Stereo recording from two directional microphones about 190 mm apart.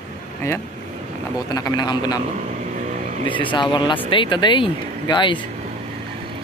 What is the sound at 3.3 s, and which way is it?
Speech, 25° left (ahead or behind).